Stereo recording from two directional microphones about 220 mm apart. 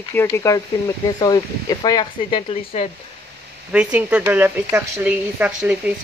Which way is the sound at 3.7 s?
5° right (ahead or behind).